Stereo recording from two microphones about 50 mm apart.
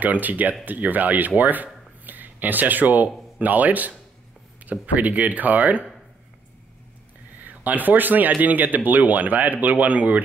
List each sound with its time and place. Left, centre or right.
0.0 s speech: right
7.4 s speech: right